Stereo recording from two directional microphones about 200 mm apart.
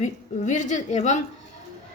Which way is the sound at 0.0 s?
40° left (ahead or behind).